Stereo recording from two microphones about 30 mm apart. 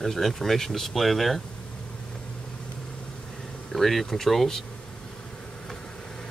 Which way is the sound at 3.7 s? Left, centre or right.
Centre.